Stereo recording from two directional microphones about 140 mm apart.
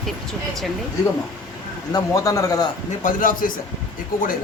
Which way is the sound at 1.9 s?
25° left (ahead or behind).